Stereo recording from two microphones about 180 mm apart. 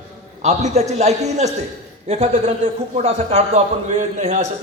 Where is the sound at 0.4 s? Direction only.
40° right (ahead or behind).